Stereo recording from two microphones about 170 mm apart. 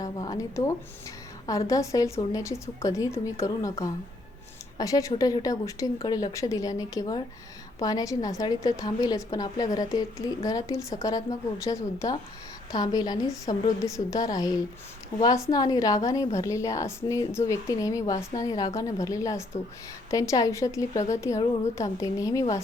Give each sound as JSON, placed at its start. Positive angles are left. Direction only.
{"t": 0.0, "sound": "a woman's voice", "side_deg": 20}